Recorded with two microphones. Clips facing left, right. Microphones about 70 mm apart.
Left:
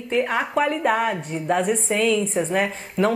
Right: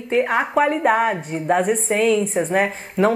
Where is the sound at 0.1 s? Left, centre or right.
Right.